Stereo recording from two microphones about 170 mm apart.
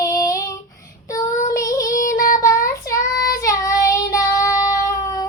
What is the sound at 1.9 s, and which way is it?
Child singing, 55° left (ahead or behind).